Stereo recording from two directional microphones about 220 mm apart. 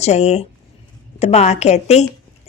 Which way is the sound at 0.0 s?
30° left (ahead or behind).